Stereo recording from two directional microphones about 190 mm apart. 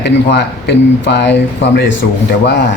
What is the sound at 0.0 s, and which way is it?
A man's voice, 60° left (ahead or behind).